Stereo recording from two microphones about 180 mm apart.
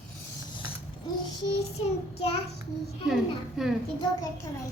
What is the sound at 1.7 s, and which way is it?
Child singing, 35° left (ahead or behind).